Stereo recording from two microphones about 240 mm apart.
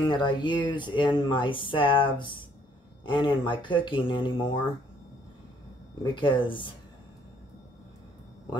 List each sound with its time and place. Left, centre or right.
0.0 s speech: centre
6.1 s speech: left